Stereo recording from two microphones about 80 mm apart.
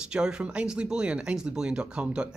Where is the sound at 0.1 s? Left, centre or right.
Centre.